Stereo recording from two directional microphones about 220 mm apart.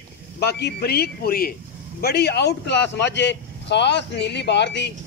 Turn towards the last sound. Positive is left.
turn(degrees=50)  # may be behind; listen again after turning